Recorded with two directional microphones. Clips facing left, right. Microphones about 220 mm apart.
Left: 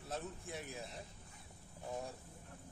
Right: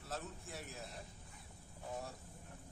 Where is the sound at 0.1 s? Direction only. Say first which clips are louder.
Left 2 dB; centre (ahead or behind).